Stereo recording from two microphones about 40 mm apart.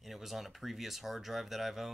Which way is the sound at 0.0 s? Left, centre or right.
Centre.